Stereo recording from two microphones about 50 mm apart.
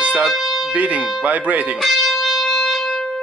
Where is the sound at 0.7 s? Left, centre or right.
Right.